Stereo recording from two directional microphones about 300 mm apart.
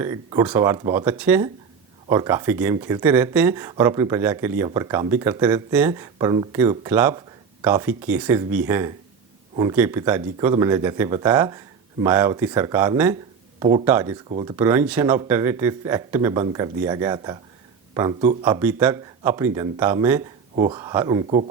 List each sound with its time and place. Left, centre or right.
0.0 s speech: centre
13.6 s speech: centre
13.8 s speech: centre